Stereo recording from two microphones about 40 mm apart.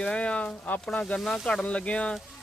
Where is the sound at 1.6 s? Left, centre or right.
Left.